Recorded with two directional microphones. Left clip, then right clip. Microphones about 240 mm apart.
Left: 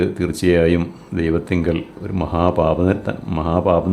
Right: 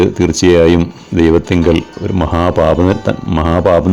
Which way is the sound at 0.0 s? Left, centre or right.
Right.